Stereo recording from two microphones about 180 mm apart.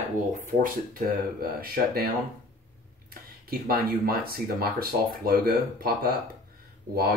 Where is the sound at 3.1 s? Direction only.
55° right (ahead or behind).